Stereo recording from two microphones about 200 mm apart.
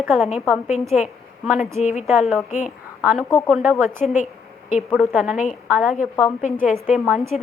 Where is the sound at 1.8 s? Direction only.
35° left (ahead or behind).